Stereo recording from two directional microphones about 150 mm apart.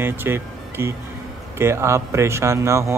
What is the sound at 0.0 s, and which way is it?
Speech, 15° right (ahead or behind).